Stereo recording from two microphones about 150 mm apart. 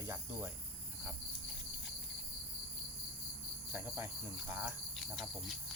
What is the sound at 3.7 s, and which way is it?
Cricket, 15° right (ahead or behind).